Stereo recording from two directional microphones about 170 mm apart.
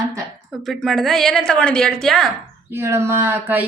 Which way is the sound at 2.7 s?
15° right (ahead or behind).